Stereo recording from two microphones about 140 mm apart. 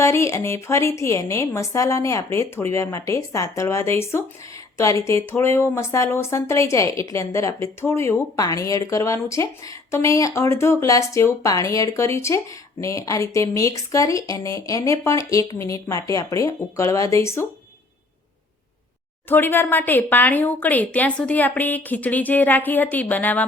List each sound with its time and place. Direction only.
0.0 s speech: 20° left (ahead or behind)
19.3 s a woman's voice: 15° left (ahead or behind)